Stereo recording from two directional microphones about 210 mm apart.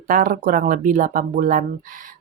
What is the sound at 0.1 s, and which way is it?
A woman's voice, 40° right (ahead or behind).